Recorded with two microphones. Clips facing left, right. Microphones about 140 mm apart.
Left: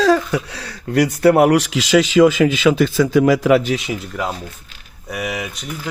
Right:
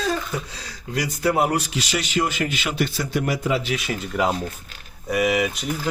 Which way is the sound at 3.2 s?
90° left.